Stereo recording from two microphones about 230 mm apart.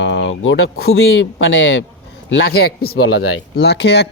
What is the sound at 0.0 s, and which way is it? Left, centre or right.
Speech, left.